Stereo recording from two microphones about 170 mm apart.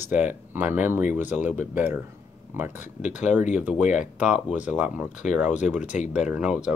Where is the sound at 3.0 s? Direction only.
45° left (ahead or behind).